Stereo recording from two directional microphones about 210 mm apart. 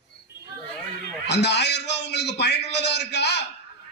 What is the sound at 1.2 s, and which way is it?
A man's voice, 55° left (ahead or behind).